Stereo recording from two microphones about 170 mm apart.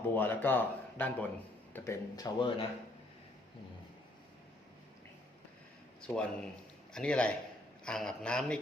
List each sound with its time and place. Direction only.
0.1 s speech: 10° left (ahead or behind)
6.0 s a man's voice: 5° left (ahead or behind)